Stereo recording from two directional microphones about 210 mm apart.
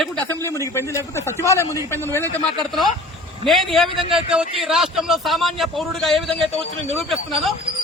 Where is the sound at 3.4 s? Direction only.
Centre (ahead or behind).